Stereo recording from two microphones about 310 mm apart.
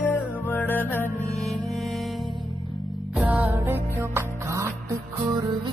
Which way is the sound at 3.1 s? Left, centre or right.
Centre.